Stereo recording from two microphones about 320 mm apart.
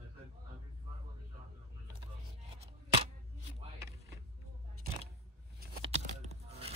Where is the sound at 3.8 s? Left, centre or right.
Centre.